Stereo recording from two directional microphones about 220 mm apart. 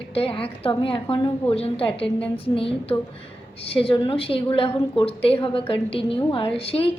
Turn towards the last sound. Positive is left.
turn(degrees=25)  # may be behind; listen again after turning